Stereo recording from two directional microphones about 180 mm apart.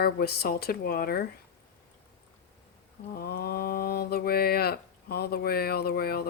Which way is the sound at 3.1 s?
60° left (ahead or behind).